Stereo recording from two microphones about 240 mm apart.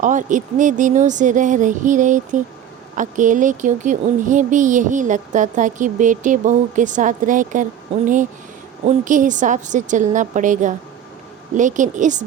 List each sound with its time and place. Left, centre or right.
0.0 s speech: right